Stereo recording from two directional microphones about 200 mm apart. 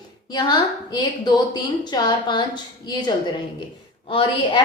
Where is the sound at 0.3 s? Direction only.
20° left (ahead or behind).